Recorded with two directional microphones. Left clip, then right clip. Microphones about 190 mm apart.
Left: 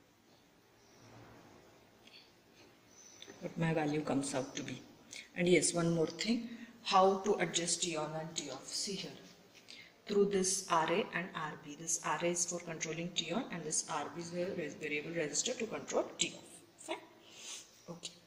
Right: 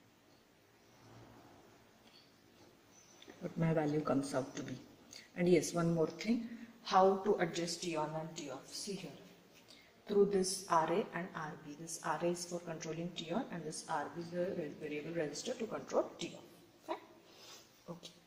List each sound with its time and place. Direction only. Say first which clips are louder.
3.5 s a woman's voice: even; 15° right (ahead or behind)
5.8 s a woman's voice: left 1 dB; centre (ahead or behind)
7.2 s speech: left 1 dB; 15° right (ahead or behind)
7.8 s a woman's voice: left 1 dB; centre (ahead or behind)
17.9 s a sound: even; 15° right (ahead or behind)